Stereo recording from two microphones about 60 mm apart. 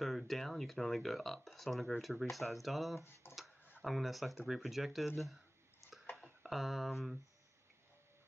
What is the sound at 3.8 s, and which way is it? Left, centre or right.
Speech, centre.